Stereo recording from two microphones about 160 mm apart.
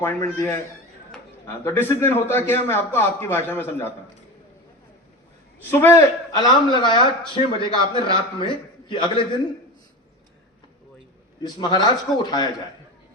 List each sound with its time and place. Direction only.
0.0 s a man's voice: 15° left (ahead or behind)
1.6 s a man's voice: 15° left (ahead or behind)
5.8 s a man's voice: 15° left (ahead or behind)
11.4 s a man's voice: 25° left (ahead or behind)